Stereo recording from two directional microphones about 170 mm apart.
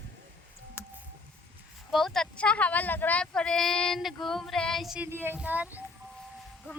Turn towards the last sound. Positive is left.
turn(degrees=-10)  # may be behind; listen again after turning